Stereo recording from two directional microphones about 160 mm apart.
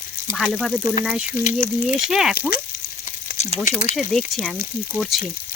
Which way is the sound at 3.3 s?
45° left (ahead or behind).